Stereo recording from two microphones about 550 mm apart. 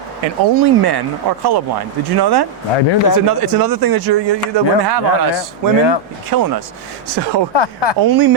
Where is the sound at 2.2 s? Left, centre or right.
Right.